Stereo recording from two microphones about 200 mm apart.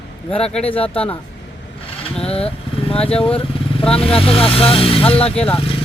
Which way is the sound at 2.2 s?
30° left (ahead or behind).